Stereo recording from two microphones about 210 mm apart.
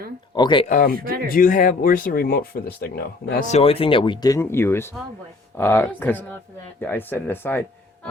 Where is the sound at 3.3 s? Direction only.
30° left (ahead or behind); by 7.6 s 10° left (ahead or behind).